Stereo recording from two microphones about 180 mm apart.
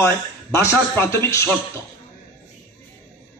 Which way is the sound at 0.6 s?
15° left (ahead or behind).